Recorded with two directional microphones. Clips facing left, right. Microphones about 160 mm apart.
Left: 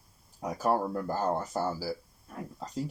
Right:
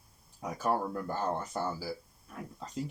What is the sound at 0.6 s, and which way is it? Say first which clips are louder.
Speech: left 3 dB; 40° left (ahead or behind).